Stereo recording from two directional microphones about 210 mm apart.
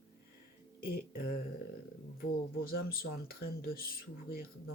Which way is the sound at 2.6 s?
45° left (ahead or behind).